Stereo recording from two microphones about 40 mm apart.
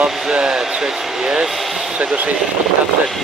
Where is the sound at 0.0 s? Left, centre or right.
Right.